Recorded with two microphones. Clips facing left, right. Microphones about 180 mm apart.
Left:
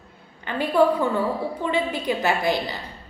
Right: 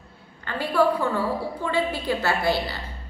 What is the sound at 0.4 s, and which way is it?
A woman's voice, 20° left (ahead or behind).